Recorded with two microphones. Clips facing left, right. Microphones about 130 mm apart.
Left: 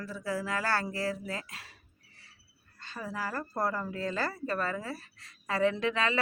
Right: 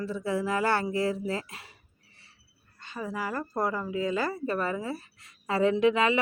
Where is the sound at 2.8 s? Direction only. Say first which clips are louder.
Right 5 dB; 20° right (ahead or behind).